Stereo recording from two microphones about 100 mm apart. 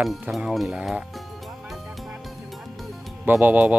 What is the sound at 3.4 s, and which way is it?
Speech, 20° right (ahead or behind).